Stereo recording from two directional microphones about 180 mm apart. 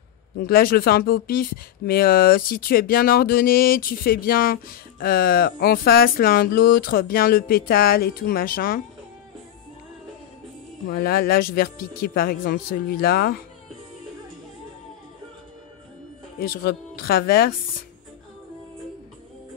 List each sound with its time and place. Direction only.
0.4 s speech: 55° left (ahead or behind)
10.9 s speech: 55° left (ahead or behind)
16.3 s speech: 55° left (ahead or behind)